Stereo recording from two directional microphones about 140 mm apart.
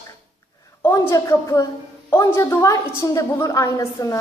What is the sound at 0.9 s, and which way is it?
A woman's voice, 20° left (ahead or behind).